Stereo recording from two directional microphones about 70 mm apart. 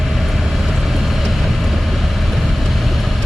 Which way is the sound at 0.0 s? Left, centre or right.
Centre.